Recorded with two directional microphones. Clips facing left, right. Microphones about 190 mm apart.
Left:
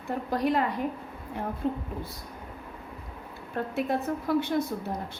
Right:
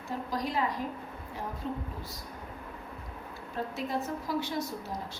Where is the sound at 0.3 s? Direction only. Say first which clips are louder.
Left 7 dB; 60° left (ahead or behind).